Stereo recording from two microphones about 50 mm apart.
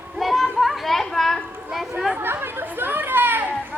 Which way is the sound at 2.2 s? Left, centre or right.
Right.